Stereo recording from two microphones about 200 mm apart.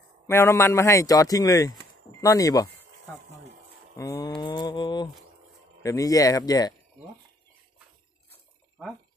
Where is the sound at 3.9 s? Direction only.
15° left (ahead or behind).